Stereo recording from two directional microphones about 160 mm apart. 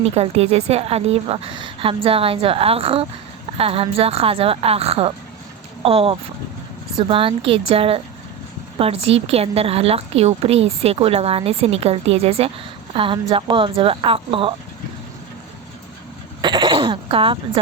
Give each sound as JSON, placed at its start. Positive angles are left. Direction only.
{"t": 0.0, "sound": "a woman's voice", "side_deg": -40}
{"t": 16.4, "sound": "throat clearing", "side_deg": -30}